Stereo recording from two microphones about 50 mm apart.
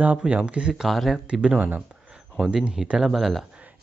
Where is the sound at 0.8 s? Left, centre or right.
Centre.